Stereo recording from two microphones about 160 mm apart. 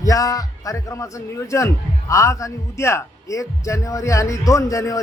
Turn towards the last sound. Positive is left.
turn(degrees=20)  # may be behind; listen again after turning